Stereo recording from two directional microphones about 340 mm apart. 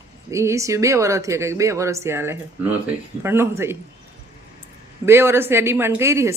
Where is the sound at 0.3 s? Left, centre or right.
Centre.